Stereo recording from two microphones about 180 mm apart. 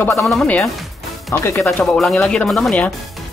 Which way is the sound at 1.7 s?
5° left (ahead or behind).